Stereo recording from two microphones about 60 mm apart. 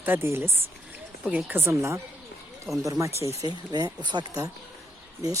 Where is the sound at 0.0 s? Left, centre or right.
Right.